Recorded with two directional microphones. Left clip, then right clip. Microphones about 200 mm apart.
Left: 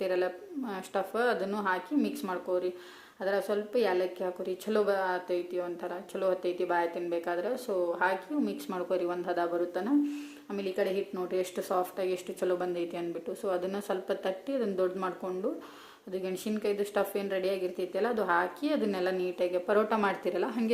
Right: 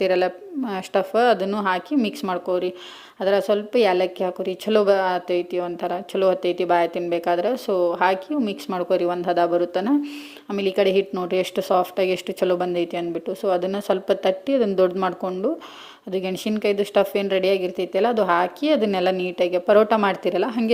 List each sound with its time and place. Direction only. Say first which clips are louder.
0.0 s a woman's voice: right 10 dB; 35° right (ahead or behind)